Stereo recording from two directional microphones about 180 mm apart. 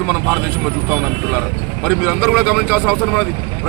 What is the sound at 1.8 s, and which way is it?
Speech, 10° right (ahead or behind).